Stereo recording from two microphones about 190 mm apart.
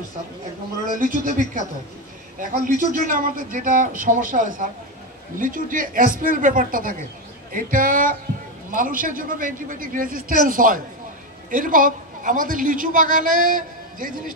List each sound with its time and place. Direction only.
0.8 s speech: 45° right (ahead or behind)
2.7 s a man's voice: 45° right (ahead or behind)